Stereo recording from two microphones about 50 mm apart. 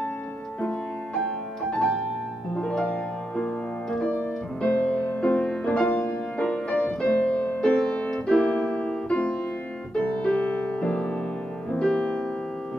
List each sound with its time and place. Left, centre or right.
1.1 s music: centre
7.0 s piano: centre
7.8 s music: left